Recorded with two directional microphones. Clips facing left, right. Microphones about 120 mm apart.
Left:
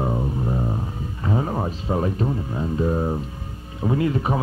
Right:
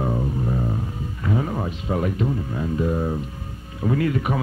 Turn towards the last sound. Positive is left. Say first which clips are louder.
# even
turn(degrees=25)  # may be behind; listen again after turning